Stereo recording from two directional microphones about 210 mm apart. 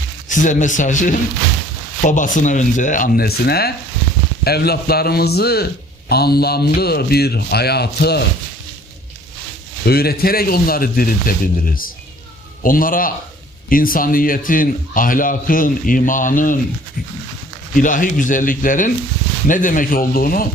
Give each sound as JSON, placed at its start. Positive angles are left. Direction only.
{"t": 0.3, "sound": "a man's voice", "side_deg": 35}
{"t": 9.8, "sound": "a man's voice", "side_deg": 45}
{"t": 17.7, "sound": "a man's voice", "side_deg": 40}